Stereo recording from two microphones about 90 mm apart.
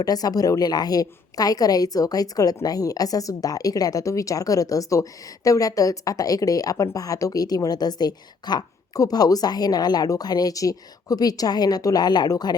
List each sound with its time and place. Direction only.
0.0 s a woman's voice: 45° left (ahead or behind)